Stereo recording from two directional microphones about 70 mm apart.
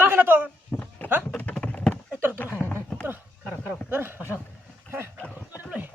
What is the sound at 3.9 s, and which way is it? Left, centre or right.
Speech, right.